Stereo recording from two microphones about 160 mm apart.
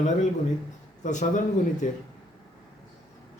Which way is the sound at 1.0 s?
50° left (ahead or behind).